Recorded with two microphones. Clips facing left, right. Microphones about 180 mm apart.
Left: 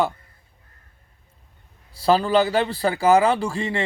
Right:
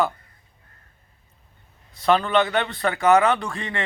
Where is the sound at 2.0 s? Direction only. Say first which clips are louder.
Left 2 dB; 35° left (ahead or behind).